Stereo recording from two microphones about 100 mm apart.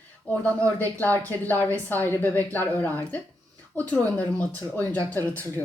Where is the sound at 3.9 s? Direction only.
15° left (ahead or behind).